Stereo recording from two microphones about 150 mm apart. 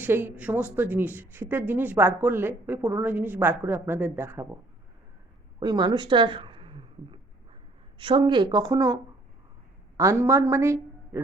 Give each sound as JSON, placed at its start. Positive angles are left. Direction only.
{"t": 0.0, "sound": "speech", "side_deg": -15}
{"t": 5.5, "sound": "speech", "side_deg": -30}
{"t": 10.0, "sound": "a woman's voice", "side_deg": -20}